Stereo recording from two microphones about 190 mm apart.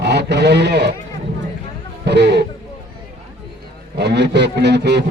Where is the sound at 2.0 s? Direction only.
60° right (ahead or behind).